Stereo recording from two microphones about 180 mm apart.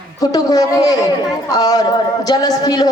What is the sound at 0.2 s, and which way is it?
A woman's voice, 20° left (ahead or behind).